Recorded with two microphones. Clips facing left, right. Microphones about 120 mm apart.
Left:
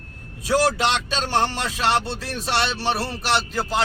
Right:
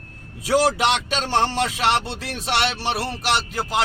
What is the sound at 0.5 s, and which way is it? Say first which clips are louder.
Speech: right 1 dB; 20° right (ahead or behind).